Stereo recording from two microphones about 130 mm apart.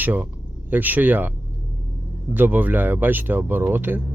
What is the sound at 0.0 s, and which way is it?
A man's voice, 15° right (ahead or behind).